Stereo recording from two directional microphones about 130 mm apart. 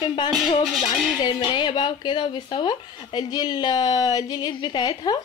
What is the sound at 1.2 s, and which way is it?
Speech, 35° left (ahead or behind).